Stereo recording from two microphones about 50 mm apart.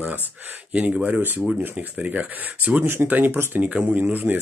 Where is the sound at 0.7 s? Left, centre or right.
Right.